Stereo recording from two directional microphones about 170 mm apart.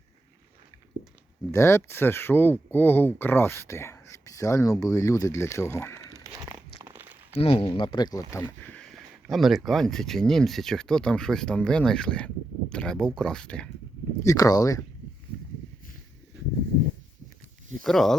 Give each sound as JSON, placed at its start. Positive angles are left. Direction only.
{"t": 1.5, "sound": "speech", "side_deg": 15}
{"t": 6.1, "sound": "crumpling", "side_deg": -20}
{"t": 7.3, "sound": "speech", "side_deg": 35}
{"t": 14.3, "sound": "speech", "side_deg": 20}
{"t": 17.8, "sound": "speech", "side_deg": 0}